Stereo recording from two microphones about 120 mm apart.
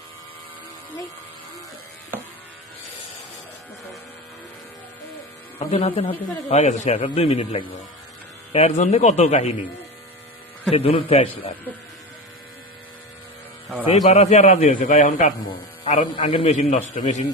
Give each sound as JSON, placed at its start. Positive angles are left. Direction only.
{"t": 5.5, "sound": "speech", "side_deg": 50}
{"t": 6.5, "sound": "a man's voice", "side_deg": 70}
{"t": 7.0, "sound": "speech", "side_deg": 50}
{"t": 8.5, "sound": "a man's voice", "side_deg": 65}
{"t": 10.7, "sound": "a man's voice", "side_deg": 55}
{"t": 13.8, "sound": "a man's voice", "side_deg": 65}
{"t": 16.1, "sound": "speech", "side_deg": 55}
{"t": 16.5, "sound": "a man's voice", "side_deg": 90}